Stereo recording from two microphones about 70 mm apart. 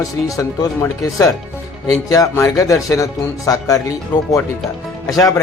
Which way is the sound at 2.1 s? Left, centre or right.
Left.